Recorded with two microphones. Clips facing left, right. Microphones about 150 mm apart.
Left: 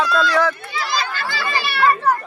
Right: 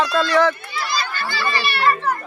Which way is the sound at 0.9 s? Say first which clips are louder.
Left 2 dB; 90° left.